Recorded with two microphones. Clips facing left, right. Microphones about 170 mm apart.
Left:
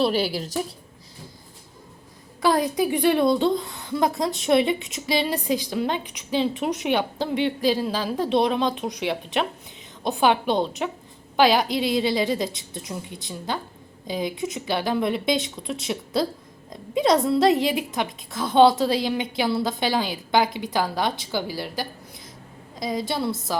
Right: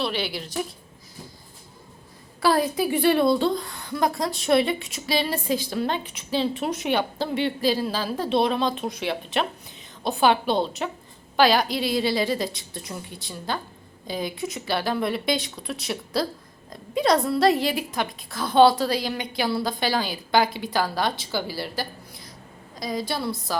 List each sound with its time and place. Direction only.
0.0 s a woman's voice: 40° left (ahead or behind)
2.4 s a woman's voice: 20° left (ahead or behind)